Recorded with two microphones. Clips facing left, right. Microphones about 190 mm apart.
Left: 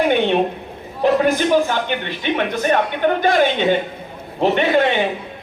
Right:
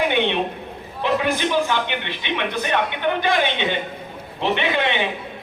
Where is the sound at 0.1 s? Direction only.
45° left (ahead or behind).